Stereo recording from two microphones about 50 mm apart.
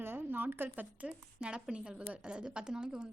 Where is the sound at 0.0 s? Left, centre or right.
Right.